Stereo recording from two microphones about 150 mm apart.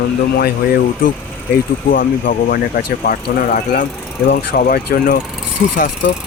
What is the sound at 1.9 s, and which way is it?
Speech, 70° left (ahead or behind).